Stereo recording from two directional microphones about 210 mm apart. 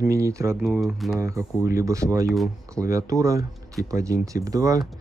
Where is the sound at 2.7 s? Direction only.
15° right (ahead or behind).